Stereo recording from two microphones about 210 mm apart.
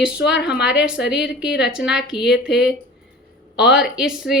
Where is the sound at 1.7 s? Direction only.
5° right (ahead or behind).